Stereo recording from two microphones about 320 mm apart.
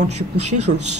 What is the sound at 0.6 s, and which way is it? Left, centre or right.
Speech, right.